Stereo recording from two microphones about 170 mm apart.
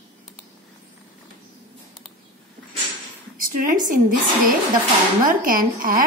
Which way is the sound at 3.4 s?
50° right (ahead or behind).